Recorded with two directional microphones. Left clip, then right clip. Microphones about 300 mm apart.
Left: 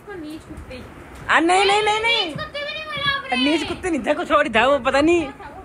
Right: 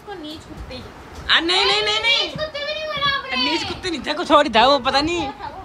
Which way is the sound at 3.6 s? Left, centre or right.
Centre.